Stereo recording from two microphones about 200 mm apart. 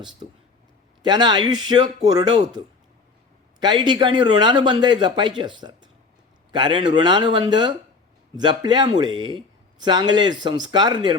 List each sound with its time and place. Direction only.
1.0 s a man's voice: 20° right (ahead or behind)
3.6 s a man's voice: 20° right (ahead or behind)